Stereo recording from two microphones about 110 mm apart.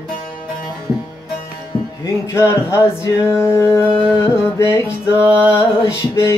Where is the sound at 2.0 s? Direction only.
25° left (ahead or behind).